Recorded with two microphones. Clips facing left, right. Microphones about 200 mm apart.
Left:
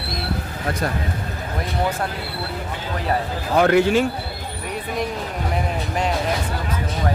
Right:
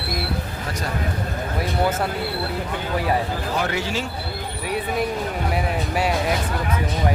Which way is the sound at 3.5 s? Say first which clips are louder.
Left 11 dB; 55° left (ahead or behind).